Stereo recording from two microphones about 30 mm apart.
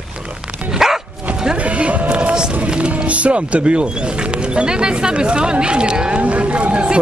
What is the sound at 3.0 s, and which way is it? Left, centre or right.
Speech, right.